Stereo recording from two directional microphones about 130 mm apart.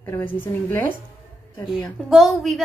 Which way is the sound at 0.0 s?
15° left (ahead or behind).